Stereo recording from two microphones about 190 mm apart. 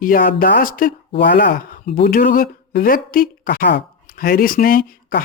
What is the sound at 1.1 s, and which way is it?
Speech, 70° left (ahead or behind).